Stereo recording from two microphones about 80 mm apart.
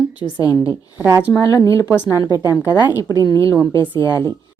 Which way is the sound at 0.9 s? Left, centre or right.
Right.